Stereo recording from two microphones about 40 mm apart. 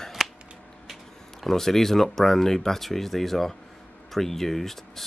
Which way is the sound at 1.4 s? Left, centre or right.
Centre.